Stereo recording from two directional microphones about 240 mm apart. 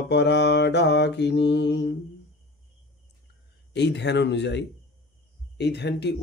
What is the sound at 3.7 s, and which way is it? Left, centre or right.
Speech, left.